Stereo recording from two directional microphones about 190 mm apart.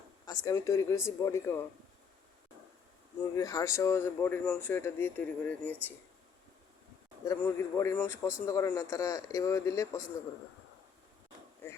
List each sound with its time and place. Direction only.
0.3 s speech: 20° left (ahead or behind)
3.3 s speech: 20° left (ahead or behind)
7.3 s speech: 15° left (ahead or behind)